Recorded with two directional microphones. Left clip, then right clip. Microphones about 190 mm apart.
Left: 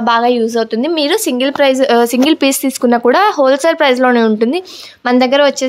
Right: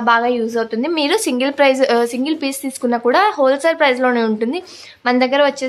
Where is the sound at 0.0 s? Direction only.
25° left (ahead or behind).